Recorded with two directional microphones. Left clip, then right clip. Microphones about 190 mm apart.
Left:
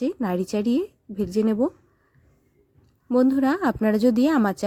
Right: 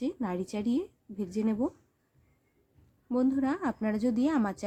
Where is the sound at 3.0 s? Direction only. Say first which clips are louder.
Left 9 dB; 45° left (ahead or behind).